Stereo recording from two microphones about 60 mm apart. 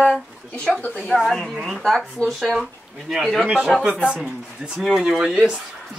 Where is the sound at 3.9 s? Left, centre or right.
Centre.